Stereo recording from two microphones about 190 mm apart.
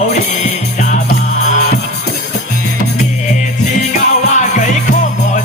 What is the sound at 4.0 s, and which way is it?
Music, 40° left (ahead or behind).